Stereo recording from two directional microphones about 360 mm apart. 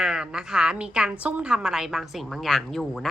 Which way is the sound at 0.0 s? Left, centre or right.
Centre.